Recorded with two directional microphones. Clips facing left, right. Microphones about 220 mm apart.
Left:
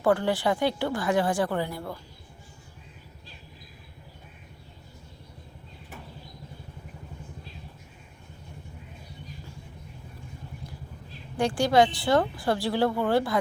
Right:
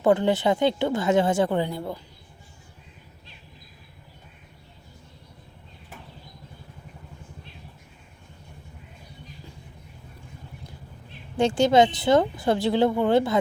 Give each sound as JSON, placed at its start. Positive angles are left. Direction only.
{"t": 0.0, "sound": "speech", "side_deg": -20}
{"t": 11.3, "sound": "speech", "side_deg": -25}